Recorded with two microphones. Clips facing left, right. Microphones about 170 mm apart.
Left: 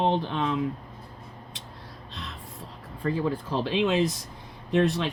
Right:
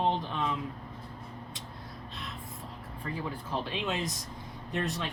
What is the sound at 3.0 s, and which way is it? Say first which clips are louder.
Speech: left 10 dB; 50° left (ahead or behind).